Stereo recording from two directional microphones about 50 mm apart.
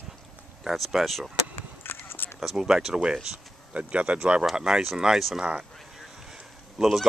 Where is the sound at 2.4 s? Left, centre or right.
Centre.